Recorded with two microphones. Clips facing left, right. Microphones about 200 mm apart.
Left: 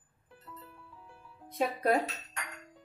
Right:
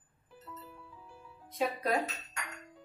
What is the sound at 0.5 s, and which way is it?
Music, centre (ahead or behind).